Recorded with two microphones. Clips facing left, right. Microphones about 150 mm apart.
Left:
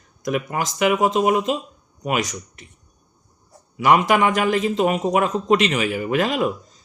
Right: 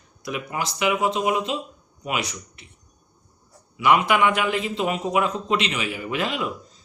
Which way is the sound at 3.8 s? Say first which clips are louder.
Left 2 dB; 40° left (ahead or behind).